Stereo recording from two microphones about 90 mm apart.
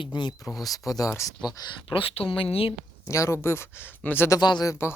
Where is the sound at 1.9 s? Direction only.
85° left.